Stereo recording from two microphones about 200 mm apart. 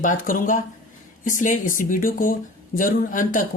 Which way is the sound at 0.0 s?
40° left (ahead or behind).